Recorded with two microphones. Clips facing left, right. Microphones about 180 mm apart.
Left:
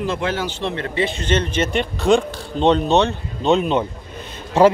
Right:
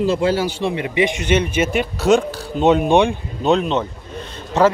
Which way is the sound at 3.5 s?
5° left (ahead or behind).